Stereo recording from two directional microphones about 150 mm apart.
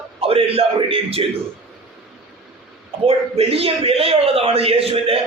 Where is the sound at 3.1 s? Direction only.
40° right (ahead or behind).